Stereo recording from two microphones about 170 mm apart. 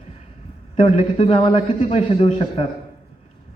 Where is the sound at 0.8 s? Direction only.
35° left (ahead or behind).